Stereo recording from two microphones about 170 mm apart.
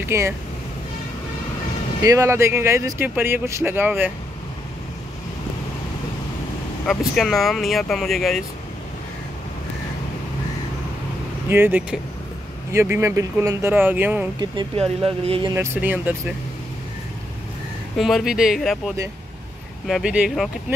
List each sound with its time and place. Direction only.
0.0 s speech: 15° right (ahead or behind)
2.0 s speech: 15° right (ahead or behind)
6.9 s speech: centre (ahead or behind)
11.4 s speech: 15° right (ahead or behind)
14.4 s speech: 25° right (ahead or behind)
15.5 s speech: 15° right (ahead or behind)
17.9 s speech: centre (ahead or behind)